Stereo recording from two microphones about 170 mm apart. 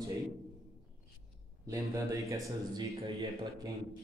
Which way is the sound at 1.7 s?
20° right (ahead or behind).